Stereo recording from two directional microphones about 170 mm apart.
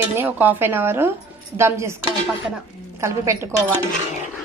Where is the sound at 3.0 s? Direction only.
15° right (ahead or behind).